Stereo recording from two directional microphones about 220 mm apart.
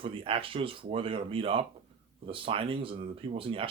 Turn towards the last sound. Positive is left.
turn(degrees=-25)  # may be behind; listen again after turning